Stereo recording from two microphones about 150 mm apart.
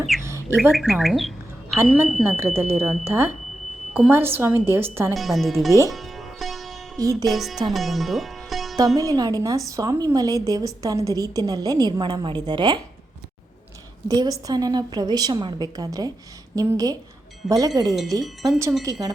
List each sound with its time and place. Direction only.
0.2 s bird: 15° right (ahead or behind)
0.7 s speech: centre (ahead or behind)
1.8 s a woman's voice: 15° right (ahead or behind)
5.1 s speech: centre (ahead or behind)
5.9 s music: centre (ahead or behind)
7.0 s a woman's voice: 25° right (ahead or behind)
7.3 s speech: centre (ahead or behind)
7.7 s music: centre (ahead or behind)
9.0 s a woman's voice: 25° right (ahead or behind)
14.1 s a woman's voice: 25° right (ahead or behind)